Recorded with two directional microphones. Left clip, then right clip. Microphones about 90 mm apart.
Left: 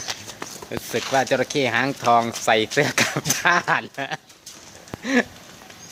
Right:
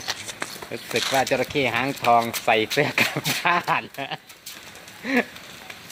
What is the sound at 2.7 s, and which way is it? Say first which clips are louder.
Speech: left 1 dB; 55° left (ahead or behind).